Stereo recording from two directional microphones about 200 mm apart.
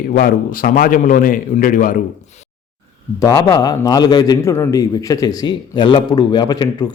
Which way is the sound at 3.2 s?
20° left (ahead or behind).